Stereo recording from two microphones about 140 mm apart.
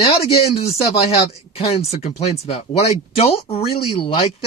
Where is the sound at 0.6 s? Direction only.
45° left (ahead or behind).